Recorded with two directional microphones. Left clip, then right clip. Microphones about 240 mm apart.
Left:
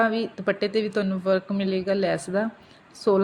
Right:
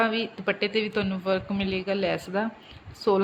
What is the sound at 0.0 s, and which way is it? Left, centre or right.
A woman's voice, centre.